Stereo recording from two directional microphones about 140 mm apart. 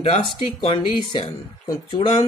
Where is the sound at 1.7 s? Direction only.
35° left (ahead or behind).